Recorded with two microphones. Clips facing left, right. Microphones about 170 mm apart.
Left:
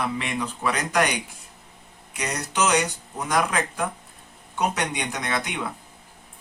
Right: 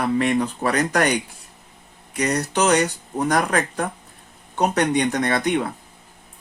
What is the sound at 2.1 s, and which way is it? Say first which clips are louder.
Speech: right 6 dB; 40° right (ahead or behind).